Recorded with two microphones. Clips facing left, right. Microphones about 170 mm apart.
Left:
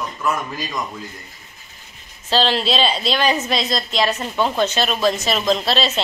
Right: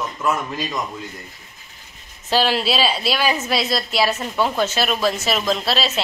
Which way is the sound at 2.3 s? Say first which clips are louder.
Even; 10° right (ahead or behind).